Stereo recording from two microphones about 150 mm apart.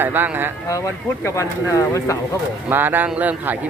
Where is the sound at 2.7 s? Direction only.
15° right (ahead or behind).